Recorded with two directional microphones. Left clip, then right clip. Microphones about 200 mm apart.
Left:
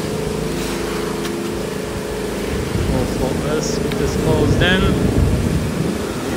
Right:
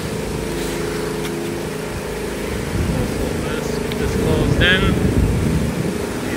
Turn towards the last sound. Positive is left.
turn(degrees=15)  # may be behind; listen again after turning